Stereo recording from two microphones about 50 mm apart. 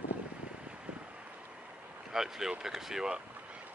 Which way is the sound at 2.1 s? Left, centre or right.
Centre.